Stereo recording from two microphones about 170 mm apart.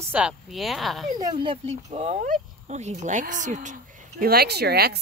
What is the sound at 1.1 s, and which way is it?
Speech, 25° right (ahead or behind).